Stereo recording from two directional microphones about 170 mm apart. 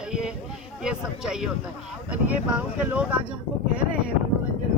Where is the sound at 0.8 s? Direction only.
5° right (ahead or behind).